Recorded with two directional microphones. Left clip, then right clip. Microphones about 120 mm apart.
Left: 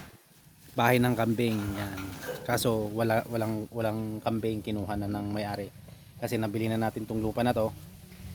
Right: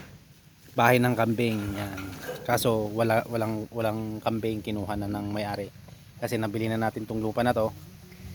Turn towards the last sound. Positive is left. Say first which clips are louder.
# right 3 dB
turn(degrees=10)  # may be behind; listen again after turning